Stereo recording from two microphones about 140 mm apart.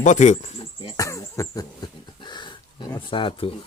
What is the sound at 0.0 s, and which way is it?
Speech, 60° left (ahead or behind).